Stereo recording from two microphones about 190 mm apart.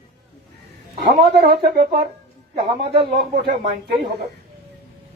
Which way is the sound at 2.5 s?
25° right (ahead or behind).